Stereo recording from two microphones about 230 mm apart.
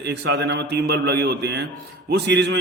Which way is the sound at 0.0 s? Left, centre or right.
Right.